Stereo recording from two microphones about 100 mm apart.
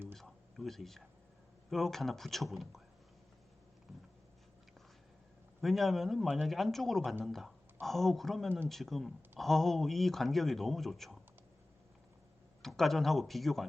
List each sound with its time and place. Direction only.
0.1 s a sound: 5° left (ahead or behind)
1.7 s speech: centre (ahead or behind)
5.6 s speech: centre (ahead or behind)
12.6 s speech: 5° left (ahead or behind)